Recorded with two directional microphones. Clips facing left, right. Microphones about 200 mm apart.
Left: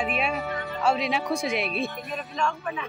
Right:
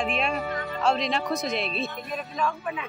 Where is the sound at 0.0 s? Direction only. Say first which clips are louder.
Even; 5° left (ahead or behind).